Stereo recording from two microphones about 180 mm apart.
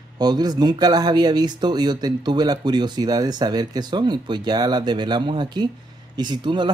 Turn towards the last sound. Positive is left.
turn(degrees=-25)  # may be behind; listen again after turning